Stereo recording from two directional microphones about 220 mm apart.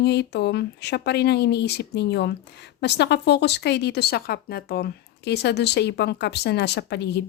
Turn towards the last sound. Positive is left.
turn(degrees=50)  # may be behind; listen again after turning